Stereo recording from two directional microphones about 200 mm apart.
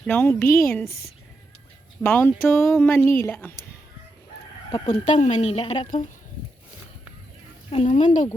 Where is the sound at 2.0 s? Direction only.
10° left (ahead or behind).